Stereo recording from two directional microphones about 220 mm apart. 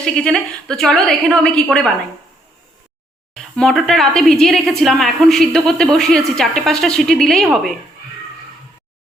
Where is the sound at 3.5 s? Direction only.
Centre (ahead or behind).